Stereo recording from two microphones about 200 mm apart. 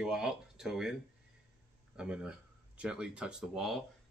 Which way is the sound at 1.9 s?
5° right (ahead or behind).